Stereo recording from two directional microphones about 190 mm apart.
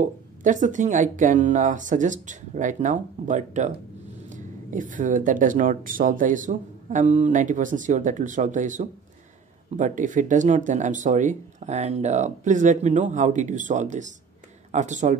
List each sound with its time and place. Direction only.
0.0 s speech: 40° right (ahead or behind)